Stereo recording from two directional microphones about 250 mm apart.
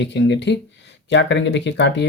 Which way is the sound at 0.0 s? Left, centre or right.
Left.